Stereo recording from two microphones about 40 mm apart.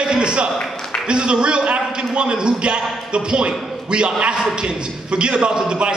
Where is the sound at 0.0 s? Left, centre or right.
Right.